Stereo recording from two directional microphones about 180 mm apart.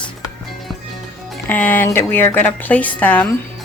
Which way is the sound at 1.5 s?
10° left (ahead or behind).